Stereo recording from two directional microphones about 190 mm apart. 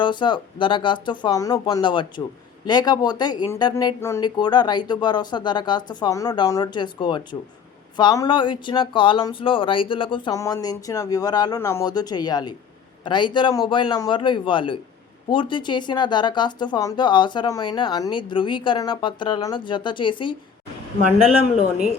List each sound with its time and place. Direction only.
0.0 s speech: 25° left (ahead or behind)